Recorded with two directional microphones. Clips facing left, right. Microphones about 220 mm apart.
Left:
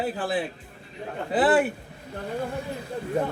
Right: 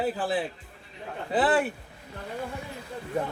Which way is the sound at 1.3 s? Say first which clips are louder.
Left 3 dB; 5° left (ahead or behind).